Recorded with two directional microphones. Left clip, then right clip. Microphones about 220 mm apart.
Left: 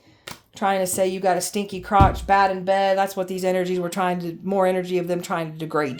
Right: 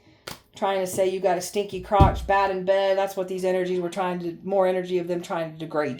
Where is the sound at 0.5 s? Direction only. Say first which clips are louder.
Left 3 dB; 45° left (ahead or behind).